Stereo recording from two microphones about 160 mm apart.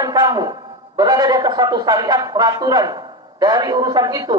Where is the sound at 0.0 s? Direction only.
25° right (ahead or behind).